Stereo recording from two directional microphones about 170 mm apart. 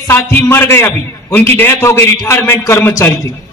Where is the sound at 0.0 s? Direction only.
15° left (ahead or behind).